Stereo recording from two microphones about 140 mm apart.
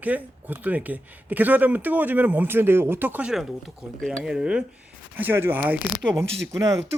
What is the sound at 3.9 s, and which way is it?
Speech, 5° left (ahead or behind).